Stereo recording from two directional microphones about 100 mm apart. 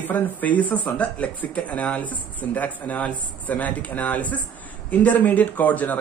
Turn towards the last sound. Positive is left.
turn(degrees=15)  # may be behind; listen again after turning